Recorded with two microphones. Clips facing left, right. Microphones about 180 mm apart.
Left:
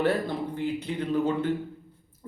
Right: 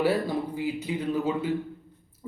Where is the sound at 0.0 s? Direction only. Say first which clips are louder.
Right 1 dB; 10° right (ahead or behind).